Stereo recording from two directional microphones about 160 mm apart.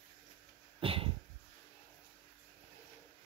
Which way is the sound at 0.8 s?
35° right (ahead or behind).